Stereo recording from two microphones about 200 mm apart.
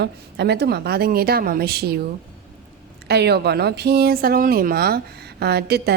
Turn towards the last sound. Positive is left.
turn(degrees=-55)  # may be behind; listen again after turning